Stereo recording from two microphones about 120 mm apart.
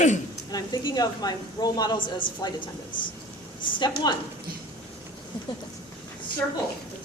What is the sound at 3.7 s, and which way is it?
Speech, 40° left (ahead or behind).